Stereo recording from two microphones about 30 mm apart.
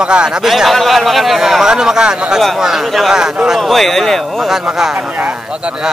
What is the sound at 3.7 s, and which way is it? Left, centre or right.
Speech, centre.